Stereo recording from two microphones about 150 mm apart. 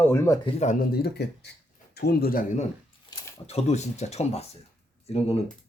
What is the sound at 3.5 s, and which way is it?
Speech, 45° left (ahead or behind).